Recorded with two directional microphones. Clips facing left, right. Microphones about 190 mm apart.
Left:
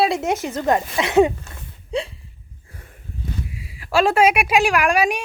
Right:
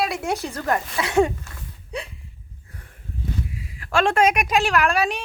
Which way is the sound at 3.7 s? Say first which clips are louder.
Left 3 dB; 10° left (ahead or behind).